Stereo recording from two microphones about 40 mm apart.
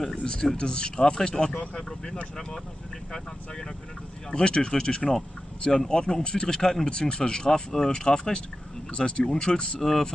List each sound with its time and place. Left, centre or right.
0.1 s speech: left
1.8 s speech: centre
4.3 s speech: centre
6.9 s speech: left
9.8 s speech: centre